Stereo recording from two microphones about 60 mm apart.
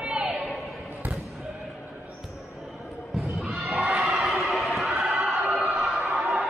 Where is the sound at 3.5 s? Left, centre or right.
Centre.